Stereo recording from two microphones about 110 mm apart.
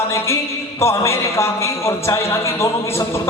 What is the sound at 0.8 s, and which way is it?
A man's voice, 25° left (ahead or behind).